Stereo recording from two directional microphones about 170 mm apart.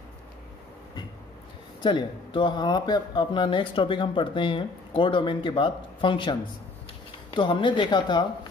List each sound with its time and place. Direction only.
1.8 s speech: 25° left (ahead or behind)
7.3 s speech: 30° left (ahead or behind)